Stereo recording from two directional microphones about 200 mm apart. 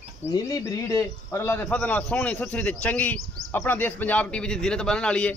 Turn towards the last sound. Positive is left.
turn(degrees=5)  # may be behind; listen again after turning